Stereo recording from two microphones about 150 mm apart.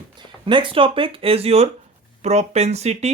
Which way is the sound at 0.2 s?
35° right (ahead or behind).